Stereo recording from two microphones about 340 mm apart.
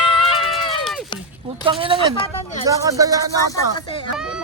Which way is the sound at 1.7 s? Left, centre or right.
Centre.